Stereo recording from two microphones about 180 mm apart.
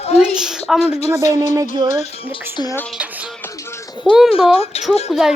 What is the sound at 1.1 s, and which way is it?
Speech, 15° right (ahead or behind).